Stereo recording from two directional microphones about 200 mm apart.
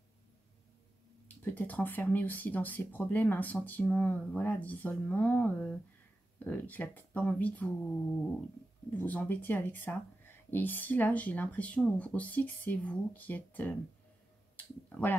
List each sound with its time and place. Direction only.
1.4 s speech: 10° left (ahead or behind)
8.9 s speech: 10° left (ahead or behind)
14.9 s speech: 10° left (ahead or behind)